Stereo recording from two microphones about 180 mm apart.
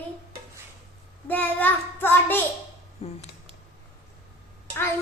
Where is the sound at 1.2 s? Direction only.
10° left (ahead or behind).